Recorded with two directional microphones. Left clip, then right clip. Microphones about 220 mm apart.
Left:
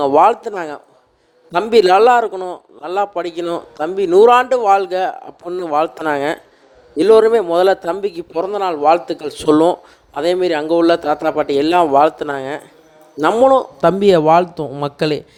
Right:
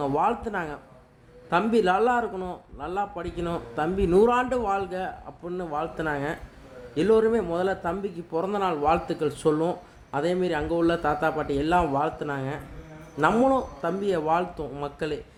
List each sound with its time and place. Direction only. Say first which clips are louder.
0.0 s a man's voice: left 13 dB; 35° left (ahead or behind)